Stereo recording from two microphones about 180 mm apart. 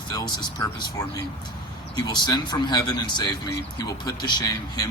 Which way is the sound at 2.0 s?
25° left (ahead or behind).